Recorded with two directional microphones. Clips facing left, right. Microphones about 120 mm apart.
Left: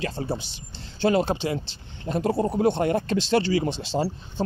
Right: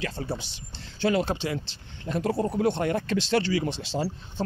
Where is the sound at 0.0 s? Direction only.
25° left (ahead or behind).